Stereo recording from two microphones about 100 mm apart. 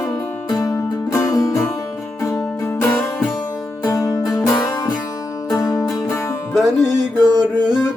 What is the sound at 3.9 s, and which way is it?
Music, 35° left (ahead or behind).